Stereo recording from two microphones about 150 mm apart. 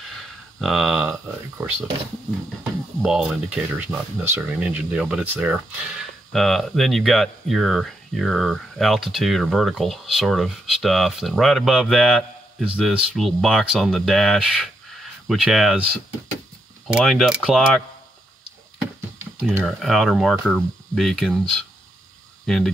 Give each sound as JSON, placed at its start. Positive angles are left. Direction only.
{"t": 0.6, "sound": "speech", "side_deg": 0}
{"t": 1.6, "sound": "speech", "side_deg": -15}
{"t": 3.0, "sound": "speech", "side_deg": -5}
{"t": 16.8, "sound": "speech", "side_deg": 0}
{"t": 19.6, "sound": "speech", "side_deg": 0}